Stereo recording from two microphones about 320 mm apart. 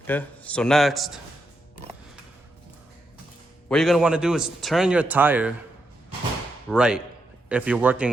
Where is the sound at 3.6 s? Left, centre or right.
Centre.